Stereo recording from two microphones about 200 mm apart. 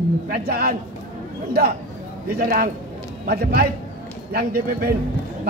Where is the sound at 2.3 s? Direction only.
50° right (ahead or behind).